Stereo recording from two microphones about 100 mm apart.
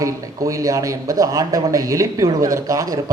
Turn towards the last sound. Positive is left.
turn(degrees=-35)  # may be behind; listen again after turning